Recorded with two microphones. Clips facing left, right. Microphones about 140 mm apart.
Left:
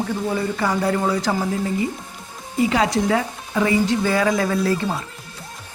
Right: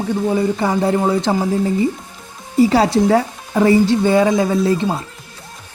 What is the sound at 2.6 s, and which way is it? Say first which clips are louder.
Speech: right 6 dB; 35° right (ahead or behind).